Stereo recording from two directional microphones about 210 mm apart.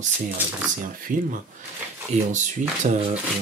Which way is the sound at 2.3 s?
35° right (ahead or behind).